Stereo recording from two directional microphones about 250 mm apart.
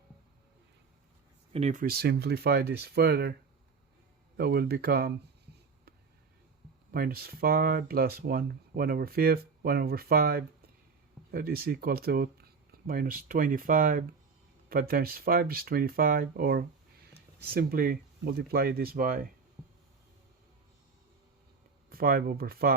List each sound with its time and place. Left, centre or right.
1.5 s speech: right
4.4 s speech: right
6.9 s speech: right
21.8 s speech: right